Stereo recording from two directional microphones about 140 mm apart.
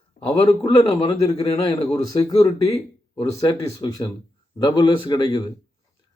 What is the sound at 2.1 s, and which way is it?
A man's voice, 25° left (ahead or behind).